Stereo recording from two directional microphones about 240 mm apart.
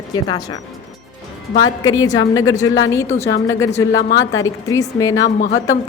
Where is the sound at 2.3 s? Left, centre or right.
Centre.